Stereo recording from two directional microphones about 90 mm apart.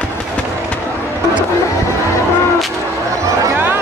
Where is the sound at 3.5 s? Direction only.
20° right (ahead or behind).